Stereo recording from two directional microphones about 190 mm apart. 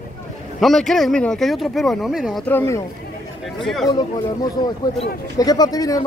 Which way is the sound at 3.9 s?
20° left (ahead or behind).